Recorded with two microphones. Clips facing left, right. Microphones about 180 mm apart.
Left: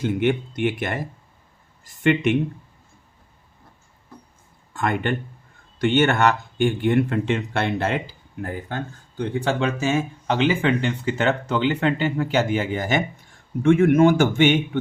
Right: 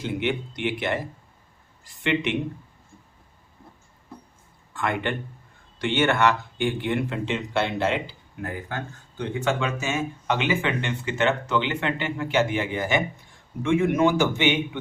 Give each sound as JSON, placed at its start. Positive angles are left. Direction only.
{"t": 0.0, "sound": "speech", "side_deg": 45}
{"t": 4.7, "sound": "speech", "side_deg": 45}
{"t": 8.4, "sound": "speech", "side_deg": 30}
{"t": 13.6, "sound": "speech", "side_deg": 50}